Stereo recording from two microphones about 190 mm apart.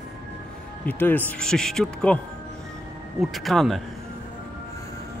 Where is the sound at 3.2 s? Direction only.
Centre (ahead or behind).